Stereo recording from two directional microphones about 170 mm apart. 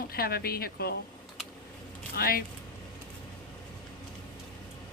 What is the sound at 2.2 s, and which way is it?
Speech, 60° left (ahead or behind).